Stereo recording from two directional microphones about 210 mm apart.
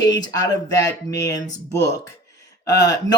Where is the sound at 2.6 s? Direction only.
20° left (ahead or behind).